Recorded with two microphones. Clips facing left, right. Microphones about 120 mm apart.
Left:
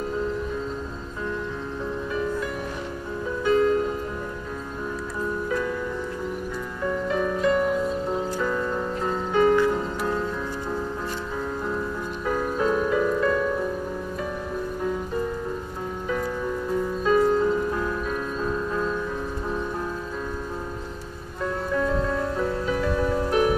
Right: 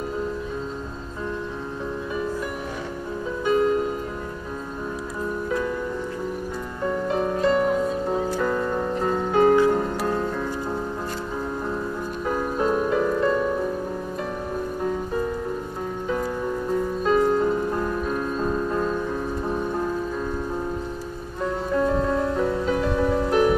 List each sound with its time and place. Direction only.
3.4 s music: 15° right (ahead or behind)
7.1 s music: 35° right (ahead or behind)
12.3 s music: 30° right (ahead or behind)
17.0 s music: 30° right (ahead or behind)
21.7 s music: 30° right (ahead or behind)